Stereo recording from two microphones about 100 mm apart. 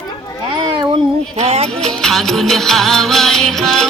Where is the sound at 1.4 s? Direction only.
90° right.